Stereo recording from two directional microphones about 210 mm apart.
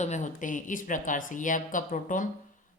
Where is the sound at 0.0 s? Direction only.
35° left (ahead or behind).